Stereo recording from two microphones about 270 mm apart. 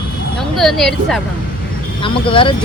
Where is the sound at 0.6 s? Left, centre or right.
Centre.